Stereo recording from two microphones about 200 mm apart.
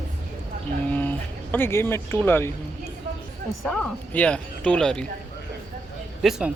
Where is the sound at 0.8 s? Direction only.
10° left (ahead or behind).